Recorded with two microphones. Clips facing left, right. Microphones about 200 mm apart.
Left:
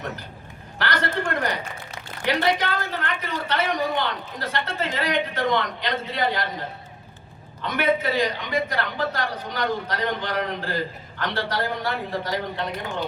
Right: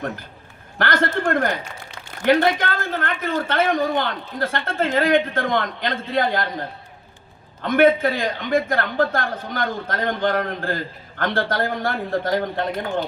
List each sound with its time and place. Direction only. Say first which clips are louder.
0.8 s a woman's voice: right 4 dB; 50° right (ahead or behind)
7.6 s a woman's voice: right 7 dB; 50° right (ahead or behind)